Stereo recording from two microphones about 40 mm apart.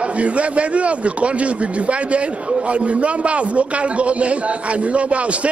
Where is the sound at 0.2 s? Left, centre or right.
Right.